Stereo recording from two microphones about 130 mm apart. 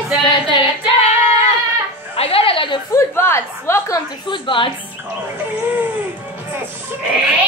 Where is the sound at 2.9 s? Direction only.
20° left (ahead or behind).